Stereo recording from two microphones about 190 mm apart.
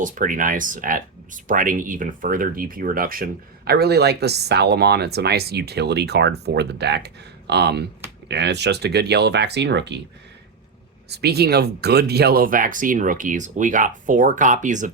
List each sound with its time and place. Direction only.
0.0 s speech: 45° right (ahead or behind); by 10.0 s 65° right (ahead or behind)
11.1 s speech: 60° right (ahead or behind); by 14.9 s 40° right (ahead or behind)